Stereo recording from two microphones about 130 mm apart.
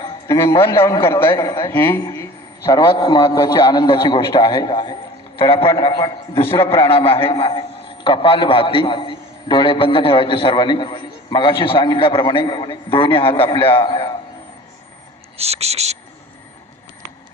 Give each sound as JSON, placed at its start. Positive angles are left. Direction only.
{"t": 0.0, "sound": "a man's voice", "side_deg": 25}
{"t": 1.7, "sound": "speech", "side_deg": 15}
{"t": 2.6, "sound": "a man's voice", "side_deg": 35}
{"t": 6.4, "sound": "a man's voice", "side_deg": 20}
{"t": 6.9, "sound": "a man's voice", "side_deg": 45}
{"t": 15.4, "sound": "speech", "side_deg": -55}